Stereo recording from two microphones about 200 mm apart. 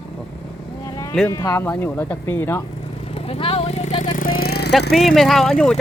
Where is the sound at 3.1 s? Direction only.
30° left (ahead or behind).